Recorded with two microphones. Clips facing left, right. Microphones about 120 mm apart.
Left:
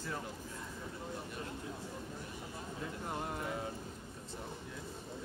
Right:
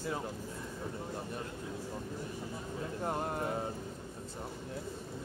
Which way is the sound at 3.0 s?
40° right (ahead or behind).